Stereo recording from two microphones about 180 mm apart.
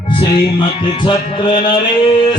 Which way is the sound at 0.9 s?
25° left (ahead or behind).